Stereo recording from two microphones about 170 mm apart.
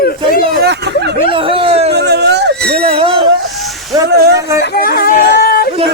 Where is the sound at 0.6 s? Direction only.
80° right.